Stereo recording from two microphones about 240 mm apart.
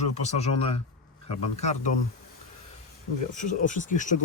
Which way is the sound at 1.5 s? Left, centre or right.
Left.